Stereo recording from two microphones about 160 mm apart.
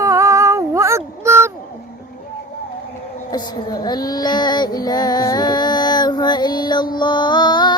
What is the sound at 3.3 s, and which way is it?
Female singing, 25° left (ahead or behind).